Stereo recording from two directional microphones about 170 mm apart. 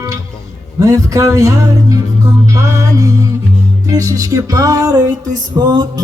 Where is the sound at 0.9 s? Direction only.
20° right (ahead or behind).